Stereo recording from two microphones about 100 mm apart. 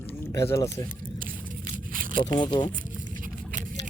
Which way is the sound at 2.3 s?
45° left (ahead or behind).